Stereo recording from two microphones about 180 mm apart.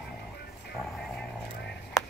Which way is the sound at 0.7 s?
Centre (ahead or behind).